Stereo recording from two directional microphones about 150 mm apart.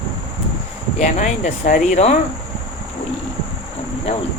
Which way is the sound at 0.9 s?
55° left (ahead or behind).